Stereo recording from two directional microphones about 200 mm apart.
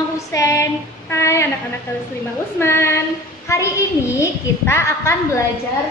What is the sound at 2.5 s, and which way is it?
A child's voice, 10° left (ahead or behind).